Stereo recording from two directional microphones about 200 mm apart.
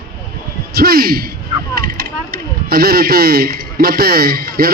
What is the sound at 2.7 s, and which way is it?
A man's voice, 50° right (ahead or behind).